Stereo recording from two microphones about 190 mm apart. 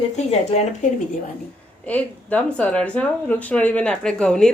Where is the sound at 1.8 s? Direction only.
10° left (ahead or behind).